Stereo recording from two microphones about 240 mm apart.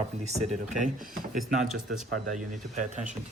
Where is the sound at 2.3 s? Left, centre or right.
Right.